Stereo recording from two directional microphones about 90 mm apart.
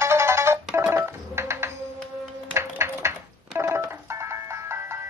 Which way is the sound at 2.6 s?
30° right (ahead or behind).